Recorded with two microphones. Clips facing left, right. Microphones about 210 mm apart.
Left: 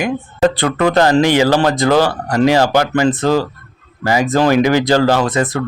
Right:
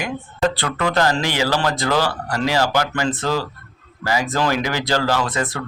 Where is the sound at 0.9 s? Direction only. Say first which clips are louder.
Left 9 dB; 20° left (ahead or behind).